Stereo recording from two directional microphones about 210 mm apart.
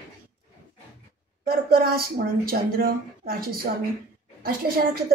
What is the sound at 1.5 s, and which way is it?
A woman's voice, 45° right (ahead or behind).